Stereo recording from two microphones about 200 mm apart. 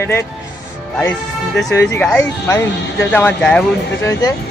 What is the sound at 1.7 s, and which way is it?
Speech, 15° left (ahead or behind).